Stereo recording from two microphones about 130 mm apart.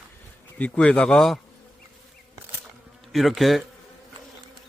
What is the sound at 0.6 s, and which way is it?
Speech, 10° left (ahead or behind).